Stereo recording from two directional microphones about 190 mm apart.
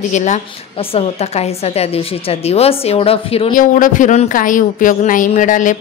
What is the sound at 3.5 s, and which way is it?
Speech, 45° left (ahead or behind).